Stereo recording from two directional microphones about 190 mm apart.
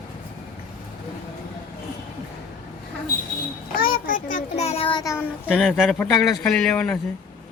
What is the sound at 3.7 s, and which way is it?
A child's voice, 45° left (ahead or behind).